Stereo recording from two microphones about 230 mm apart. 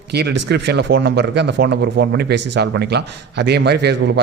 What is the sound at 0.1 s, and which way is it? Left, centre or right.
Speech, right.